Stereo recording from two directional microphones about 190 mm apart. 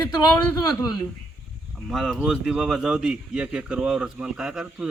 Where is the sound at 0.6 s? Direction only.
20° left (ahead or behind).